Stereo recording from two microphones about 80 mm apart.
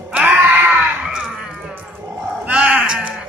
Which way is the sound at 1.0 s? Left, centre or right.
Centre.